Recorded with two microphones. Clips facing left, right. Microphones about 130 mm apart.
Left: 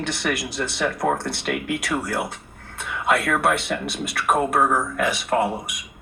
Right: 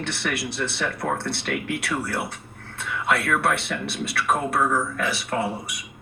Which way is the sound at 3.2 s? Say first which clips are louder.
Left 2 dB; 45° left (ahead or behind).